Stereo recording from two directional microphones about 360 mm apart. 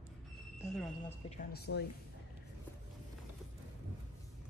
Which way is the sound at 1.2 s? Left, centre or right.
Left.